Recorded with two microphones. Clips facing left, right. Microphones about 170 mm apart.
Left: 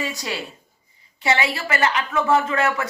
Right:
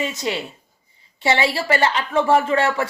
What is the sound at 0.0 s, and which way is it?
A woman's voice, 25° right (ahead or behind).